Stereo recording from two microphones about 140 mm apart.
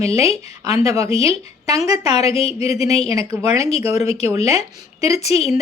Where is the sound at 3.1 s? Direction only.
25° right (ahead or behind).